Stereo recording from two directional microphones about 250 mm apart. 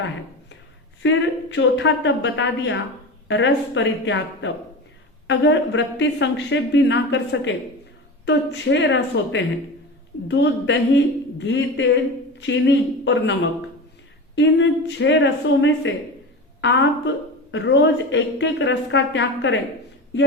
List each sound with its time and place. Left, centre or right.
1.0 s a woman's voice: left
14.3 s a woman's voice: left